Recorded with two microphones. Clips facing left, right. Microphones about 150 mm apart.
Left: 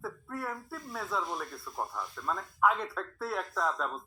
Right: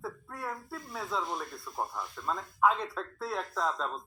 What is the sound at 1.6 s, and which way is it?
Speech, 10° right (ahead or behind).